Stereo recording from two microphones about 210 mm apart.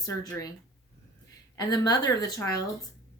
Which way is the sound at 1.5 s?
20° left (ahead or behind).